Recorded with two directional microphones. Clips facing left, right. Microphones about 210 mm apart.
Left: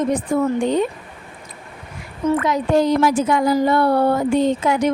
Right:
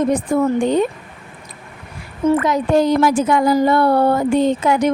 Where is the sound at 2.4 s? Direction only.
45° right (ahead or behind).